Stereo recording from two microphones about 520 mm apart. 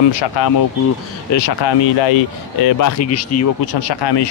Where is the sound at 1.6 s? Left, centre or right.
Left.